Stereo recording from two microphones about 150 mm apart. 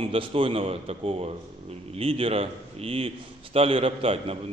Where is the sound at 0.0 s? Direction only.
35° right (ahead or behind).